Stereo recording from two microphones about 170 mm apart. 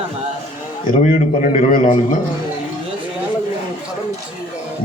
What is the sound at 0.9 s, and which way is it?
A man's voice, 50° left (ahead or behind).